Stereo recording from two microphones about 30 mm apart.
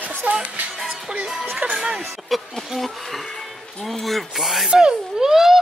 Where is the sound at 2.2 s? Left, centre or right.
Centre.